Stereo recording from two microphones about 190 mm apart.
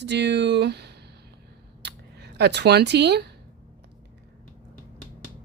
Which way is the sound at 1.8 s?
65° right (ahead or behind).